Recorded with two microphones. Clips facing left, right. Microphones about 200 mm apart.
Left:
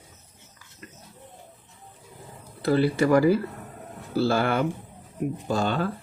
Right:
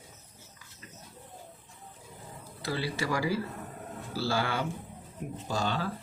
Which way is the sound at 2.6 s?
55° left (ahead or behind).